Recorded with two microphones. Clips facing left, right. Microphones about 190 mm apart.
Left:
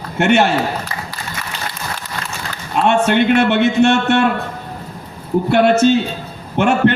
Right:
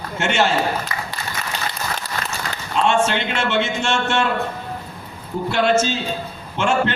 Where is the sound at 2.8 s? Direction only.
60° left (ahead or behind).